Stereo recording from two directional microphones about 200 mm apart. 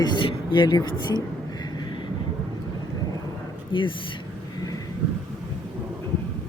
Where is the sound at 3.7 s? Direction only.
25° left (ahead or behind).